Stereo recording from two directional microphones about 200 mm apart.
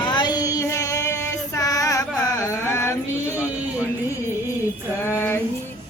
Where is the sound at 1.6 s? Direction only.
15° left (ahead or behind).